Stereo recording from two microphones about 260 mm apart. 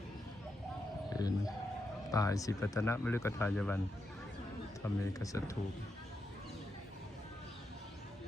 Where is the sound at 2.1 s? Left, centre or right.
Centre.